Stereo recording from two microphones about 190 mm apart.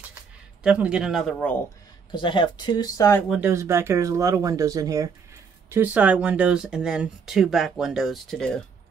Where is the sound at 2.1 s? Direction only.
25° left (ahead or behind).